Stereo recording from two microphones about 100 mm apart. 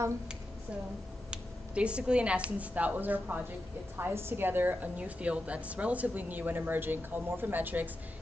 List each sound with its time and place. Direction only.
1.3 s a woman's voice: 10° right (ahead or behind)